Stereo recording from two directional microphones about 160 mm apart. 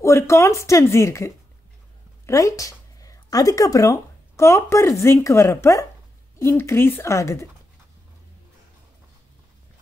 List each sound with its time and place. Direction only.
0.0 s speech: 20° left (ahead or behind)